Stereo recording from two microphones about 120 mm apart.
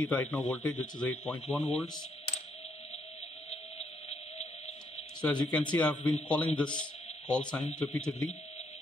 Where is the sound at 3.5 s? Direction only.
65° left (ahead or behind).